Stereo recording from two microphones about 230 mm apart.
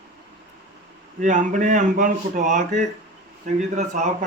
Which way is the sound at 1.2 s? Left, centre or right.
Right.